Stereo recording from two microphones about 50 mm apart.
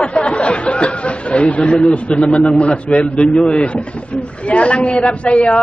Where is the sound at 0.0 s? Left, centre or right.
Left.